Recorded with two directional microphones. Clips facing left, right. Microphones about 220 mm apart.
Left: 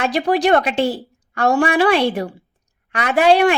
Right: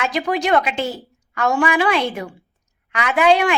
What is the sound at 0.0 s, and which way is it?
A woman's voice, 35° left (ahead or behind).